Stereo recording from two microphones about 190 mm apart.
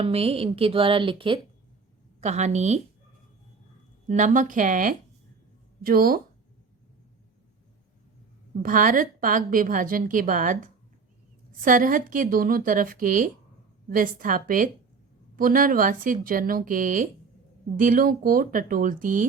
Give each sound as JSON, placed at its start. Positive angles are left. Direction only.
{"t": 0.0, "sound": "a woman's voice", "side_deg": -30}
{"t": 2.2, "sound": "a woman's voice", "side_deg": -35}
{"t": 4.1, "sound": "a woman's voice", "side_deg": -40}
{"t": 8.6, "sound": "a woman's voice", "side_deg": -45}